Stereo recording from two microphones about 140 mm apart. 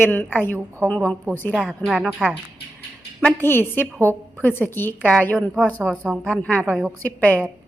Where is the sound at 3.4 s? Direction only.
15° left (ahead or behind).